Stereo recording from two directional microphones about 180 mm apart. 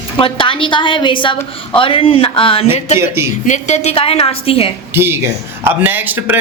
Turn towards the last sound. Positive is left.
turn(degrees=-10)  # may be behind; listen again after turning